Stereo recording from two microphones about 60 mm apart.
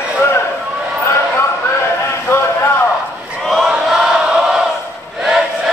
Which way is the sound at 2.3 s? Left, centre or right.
Left.